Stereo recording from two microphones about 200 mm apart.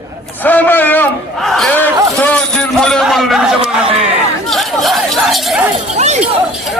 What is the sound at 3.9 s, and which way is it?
Chatter, 30° right (ahead or behind).